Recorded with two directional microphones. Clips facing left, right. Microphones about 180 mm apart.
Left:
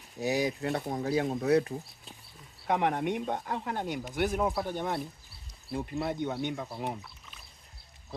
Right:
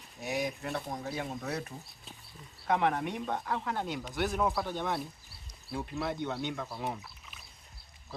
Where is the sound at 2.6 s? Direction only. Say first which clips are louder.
Left 1 dB; 15° left (ahead or behind).